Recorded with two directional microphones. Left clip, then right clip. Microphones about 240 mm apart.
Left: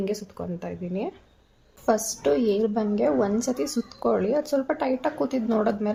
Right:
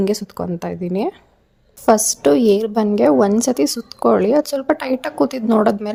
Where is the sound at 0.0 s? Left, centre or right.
Right.